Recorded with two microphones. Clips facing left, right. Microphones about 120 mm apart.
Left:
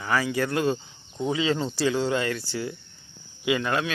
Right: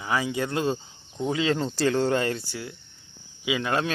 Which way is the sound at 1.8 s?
50° right (ahead or behind).